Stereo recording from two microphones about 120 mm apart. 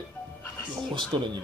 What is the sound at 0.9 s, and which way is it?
Speech, 40° right (ahead or behind).